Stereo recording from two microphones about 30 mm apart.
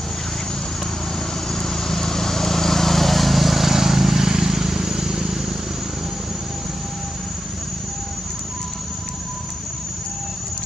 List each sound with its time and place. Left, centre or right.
1.5 s vehicle: centre